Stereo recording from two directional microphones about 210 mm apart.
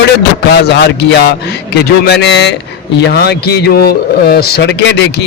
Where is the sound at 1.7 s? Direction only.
50° left (ahead or behind).